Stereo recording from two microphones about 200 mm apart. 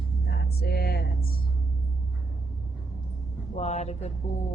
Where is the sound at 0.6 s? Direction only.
50° left (ahead or behind).